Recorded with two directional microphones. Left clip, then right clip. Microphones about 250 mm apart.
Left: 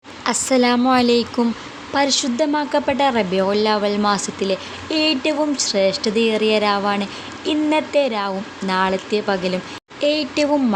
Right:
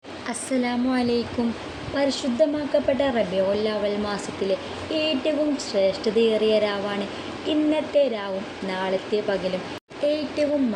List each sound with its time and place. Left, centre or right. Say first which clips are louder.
0.3 s a woman's voice: left 10 dB; left